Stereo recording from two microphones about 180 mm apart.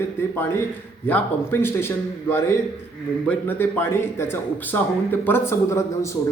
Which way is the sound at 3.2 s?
10° left (ahead or behind).